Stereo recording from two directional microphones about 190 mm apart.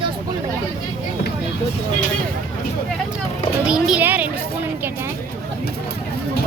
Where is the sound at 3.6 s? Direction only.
5° right (ahead or behind).